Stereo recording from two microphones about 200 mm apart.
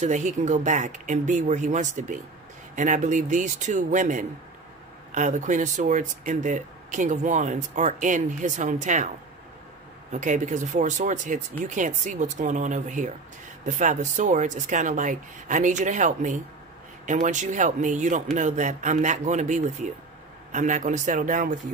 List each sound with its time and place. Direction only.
0.0 s speech: 35° right (ahead or behind)
10.1 s speech: 40° right (ahead or behind)